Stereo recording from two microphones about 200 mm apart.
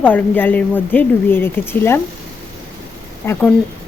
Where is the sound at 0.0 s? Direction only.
10° left (ahead or behind).